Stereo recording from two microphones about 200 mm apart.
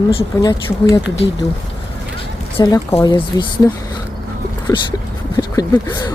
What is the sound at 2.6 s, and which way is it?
Speech, 20° left (ahead or behind).